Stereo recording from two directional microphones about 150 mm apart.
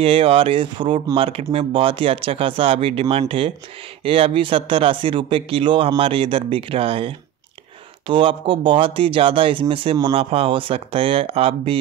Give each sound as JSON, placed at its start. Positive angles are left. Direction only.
{"t": 0.0, "sound": "speech", "side_deg": -40}